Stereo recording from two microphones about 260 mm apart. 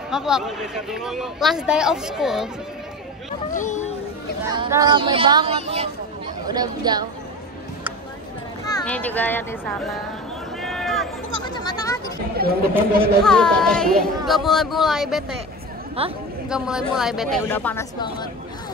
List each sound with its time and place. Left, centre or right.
0.1 s speech: centre
3.5 s speech: left
4.5 s speech: centre
8.6 s a child's voice: centre
10.6 s run: centre
11.4 s speech: centre
12.4 s speech: right
13.2 s speech: centre
16.0 s speech: right
16.4 s speech: centre